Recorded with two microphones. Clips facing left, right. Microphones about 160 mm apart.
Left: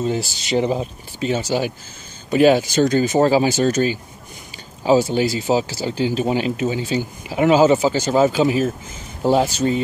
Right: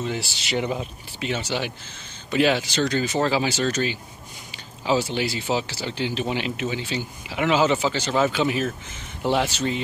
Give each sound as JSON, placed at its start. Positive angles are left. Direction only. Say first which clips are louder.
{"t": 0.0, "sound": "speech", "louder": "left 6 dB", "side_deg": 40}